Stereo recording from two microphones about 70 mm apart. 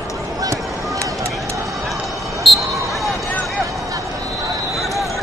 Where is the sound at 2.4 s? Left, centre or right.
Centre.